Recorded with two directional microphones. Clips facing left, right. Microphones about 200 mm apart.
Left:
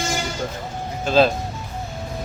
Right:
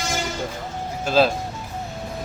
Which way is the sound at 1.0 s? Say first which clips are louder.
Left 2 dB; 5° right (ahead or behind).